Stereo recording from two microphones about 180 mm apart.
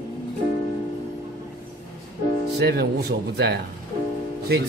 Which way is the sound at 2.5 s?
65° right (ahead or behind).